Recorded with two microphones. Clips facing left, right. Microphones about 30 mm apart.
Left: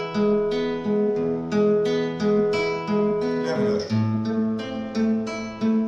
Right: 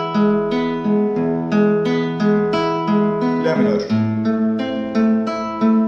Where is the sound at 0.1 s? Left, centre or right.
Right.